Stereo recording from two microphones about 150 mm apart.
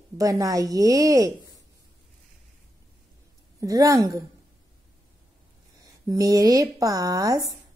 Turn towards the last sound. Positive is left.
turn(degrees=-25)  # may be behind; listen again after turning